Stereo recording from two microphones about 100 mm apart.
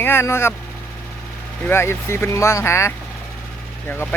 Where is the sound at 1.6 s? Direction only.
25° left (ahead or behind).